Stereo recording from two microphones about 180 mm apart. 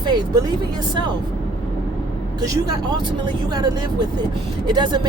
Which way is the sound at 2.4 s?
20° right (ahead or behind).